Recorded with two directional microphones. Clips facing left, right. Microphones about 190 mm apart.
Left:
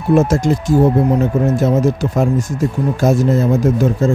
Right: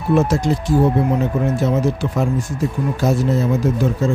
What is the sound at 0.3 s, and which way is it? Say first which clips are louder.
Speech: left 3 dB; 45° left (ahead or behind).